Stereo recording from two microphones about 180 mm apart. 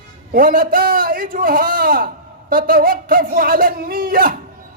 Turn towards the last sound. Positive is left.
turn(degrees=-55)  # may be behind; listen again after turning